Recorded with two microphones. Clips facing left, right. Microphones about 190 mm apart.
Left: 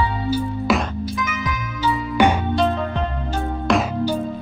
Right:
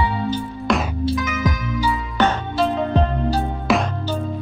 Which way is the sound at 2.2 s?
10° left (ahead or behind).